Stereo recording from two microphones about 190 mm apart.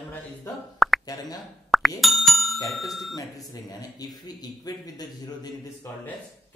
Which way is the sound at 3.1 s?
20° left (ahead or behind).